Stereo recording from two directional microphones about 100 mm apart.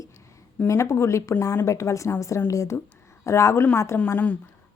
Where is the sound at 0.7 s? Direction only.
30° left (ahead or behind).